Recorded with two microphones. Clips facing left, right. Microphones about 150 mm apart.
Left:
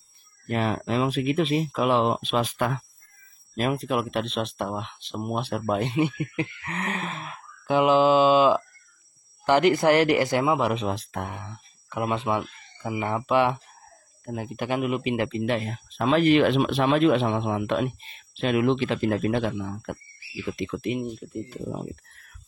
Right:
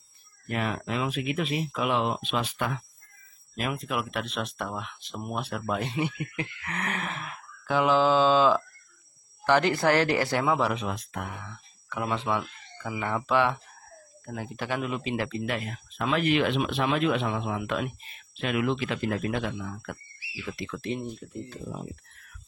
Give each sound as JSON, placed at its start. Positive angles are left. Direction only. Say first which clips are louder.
{"t": 0.5, "sound": "speech", "louder": "left 5 dB", "side_deg": 35}
{"t": 10.9, "sound": "speech", "louder": "left 4 dB", "side_deg": 30}
{"t": 21.0, "sound": "speech", "louder": "left 4 dB", "side_deg": 0}